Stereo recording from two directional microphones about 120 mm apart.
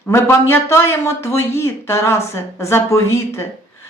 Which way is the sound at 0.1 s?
25° left (ahead or behind).